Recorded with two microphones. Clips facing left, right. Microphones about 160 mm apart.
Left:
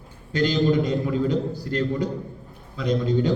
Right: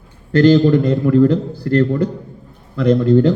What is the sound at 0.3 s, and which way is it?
A man's voice, 60° right (ahead or behind).